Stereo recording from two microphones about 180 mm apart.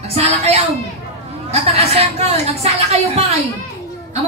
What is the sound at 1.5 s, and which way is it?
A woman's voice, 35° right (ahead or behind).